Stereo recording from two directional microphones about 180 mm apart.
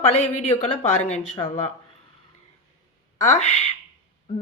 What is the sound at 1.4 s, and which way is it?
Speech, 30° left (ahead or behind).